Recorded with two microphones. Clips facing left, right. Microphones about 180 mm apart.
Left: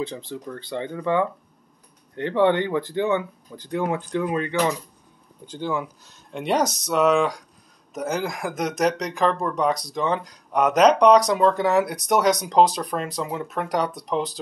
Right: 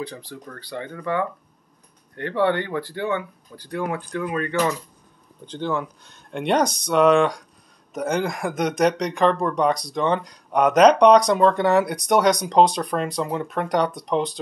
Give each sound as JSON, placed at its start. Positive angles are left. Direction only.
{"t": 0.0, "sound": "speech", "side_deg": 25}
{"t": 5.5, "sound": "speech", "side_deg": 10}